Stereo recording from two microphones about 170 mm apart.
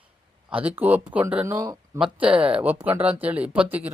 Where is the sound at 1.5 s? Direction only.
20° right (ahead or behind).